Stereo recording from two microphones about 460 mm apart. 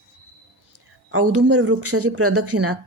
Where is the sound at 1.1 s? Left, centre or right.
Right.